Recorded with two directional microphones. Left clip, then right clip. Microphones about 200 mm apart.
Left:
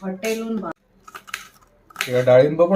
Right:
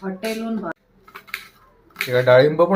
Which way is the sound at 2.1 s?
5° right (ahead or behind).